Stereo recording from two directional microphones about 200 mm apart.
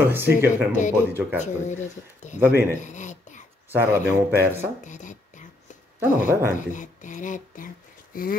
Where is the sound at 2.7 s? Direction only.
35° left (ahead or behind).